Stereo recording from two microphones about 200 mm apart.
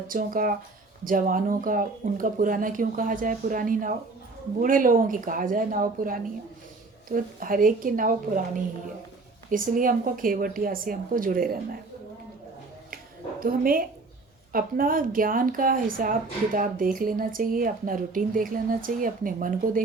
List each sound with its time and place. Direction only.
0.1 s a woman's voice: 45° right (ahead or behind)
13.4 s a woman's voice: 45° right (ahead or behind)